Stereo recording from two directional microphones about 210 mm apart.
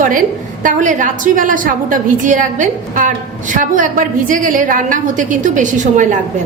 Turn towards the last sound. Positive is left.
turn(degrees=-35)  # may be behind; listen again after turning